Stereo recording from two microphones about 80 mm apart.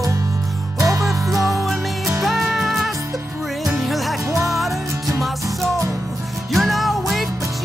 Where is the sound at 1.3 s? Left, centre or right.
Right.